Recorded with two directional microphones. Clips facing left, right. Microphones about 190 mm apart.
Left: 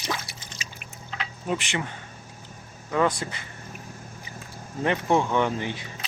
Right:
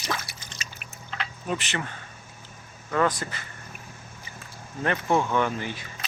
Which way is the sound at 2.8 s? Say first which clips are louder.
Left 1 dB; 15° left (ahead or behind).